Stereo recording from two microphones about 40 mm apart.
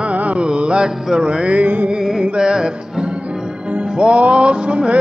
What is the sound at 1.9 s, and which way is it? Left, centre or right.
Music, centre.